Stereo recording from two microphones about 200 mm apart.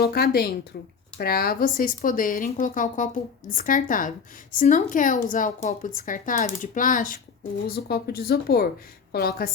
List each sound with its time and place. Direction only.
0.0 s speech: 50° left (ahead or behind)